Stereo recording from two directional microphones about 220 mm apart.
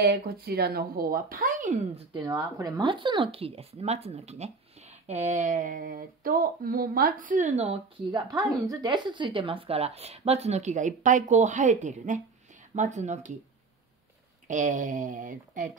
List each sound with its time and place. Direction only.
0.0 s speech: 45° right (ahead or behind)
2.1 s speech: 20° right (ahead or behind)
8.2 s speech: 15° right (ahead or behind); by 13.3 s 30° right (ahead or behind)
14.5 s speech: 35° right (ahead or behind)